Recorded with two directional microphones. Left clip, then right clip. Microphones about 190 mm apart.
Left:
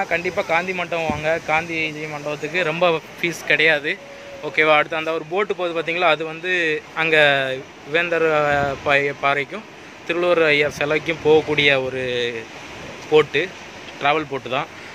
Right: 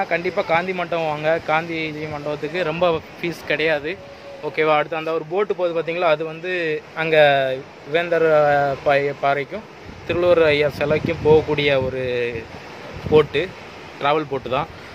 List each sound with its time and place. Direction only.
0.0 s speech: 10° right (ahead or behind)